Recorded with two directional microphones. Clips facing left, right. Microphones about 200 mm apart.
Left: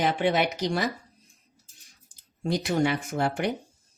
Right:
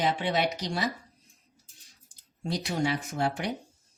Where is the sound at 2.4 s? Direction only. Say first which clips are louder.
Left 5 dB; 55° left (ahead or behind).